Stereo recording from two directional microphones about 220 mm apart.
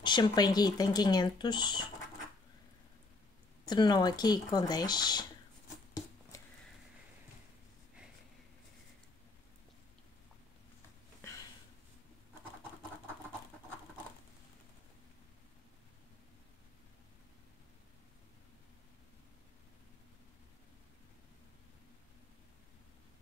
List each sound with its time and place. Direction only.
0.0 s speech: 20° left (ahead or behind)
3.6 s speech: 20° left (ahead or behind)